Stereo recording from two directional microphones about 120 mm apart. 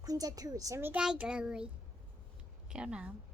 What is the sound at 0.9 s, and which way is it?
Speech, 10° right (ahead or behind).